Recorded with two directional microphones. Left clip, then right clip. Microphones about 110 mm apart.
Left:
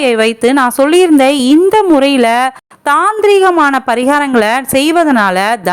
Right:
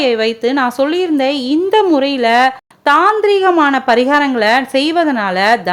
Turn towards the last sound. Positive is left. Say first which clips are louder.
# left 1 dB
turn(degrees=50)  # may be behind; listen again after turning